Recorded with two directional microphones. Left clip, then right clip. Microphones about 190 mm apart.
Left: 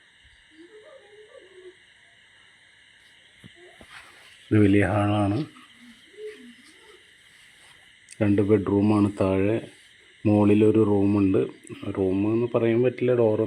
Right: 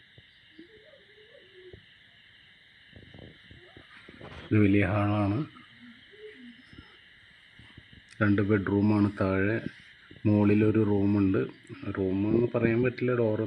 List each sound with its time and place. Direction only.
4.5 s speech: 25° left (ahead or behind)
8.1 s speech: 20° left (ahead or behind)